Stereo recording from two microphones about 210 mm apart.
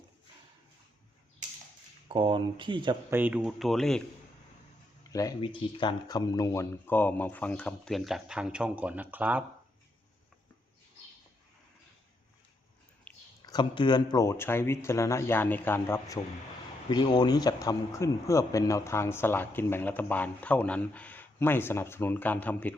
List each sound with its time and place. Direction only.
2.0 s speech: 25° right (ahead or behind)
3.1 s speech: 10° right (ahead or behind)
5.1 s a man's voice: 15° left (ahead or behind); by 9.4 s 10° right (ahead or behind)
13.4 s a man's voice: 20° left (ahead or behind)